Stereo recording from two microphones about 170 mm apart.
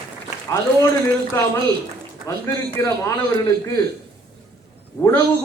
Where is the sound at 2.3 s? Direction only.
20° left (ahead or behind).